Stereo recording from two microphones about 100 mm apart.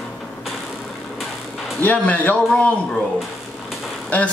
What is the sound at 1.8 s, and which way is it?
Speech, 15° left (ahead or behind).